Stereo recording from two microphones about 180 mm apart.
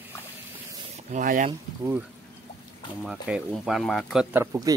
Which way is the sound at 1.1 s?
45° right (ahead or behind).